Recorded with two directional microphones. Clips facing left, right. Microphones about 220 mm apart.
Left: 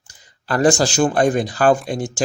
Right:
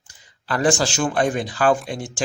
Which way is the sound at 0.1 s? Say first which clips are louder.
Left 4 dB; 40° left (ahead or behind).